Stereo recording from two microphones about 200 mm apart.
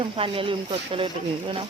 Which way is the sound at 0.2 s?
25° right (ahead or behind).